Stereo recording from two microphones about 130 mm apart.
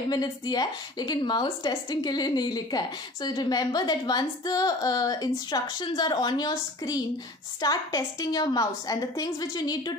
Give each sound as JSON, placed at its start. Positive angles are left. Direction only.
{"t": 0.1, "sound": "a woman's voice", "side_deg": 30}